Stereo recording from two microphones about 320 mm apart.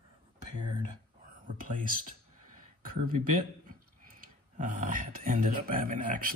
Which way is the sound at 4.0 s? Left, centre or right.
Right.